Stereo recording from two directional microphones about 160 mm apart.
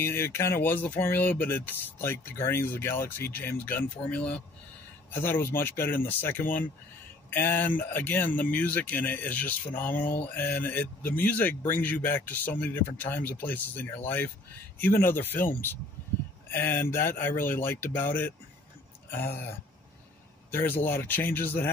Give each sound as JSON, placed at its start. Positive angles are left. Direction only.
{"t": 0.0, "sound": "speech", "side_deg": 15}
{"t": 20.8, "sound": "speech", "side_deg": 15}